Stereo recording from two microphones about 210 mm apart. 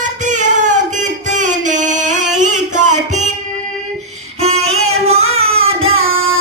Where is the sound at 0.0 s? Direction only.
35° right (ahead or behind).